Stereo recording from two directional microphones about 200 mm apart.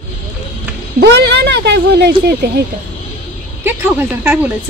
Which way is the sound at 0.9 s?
55° right (ahead or behind).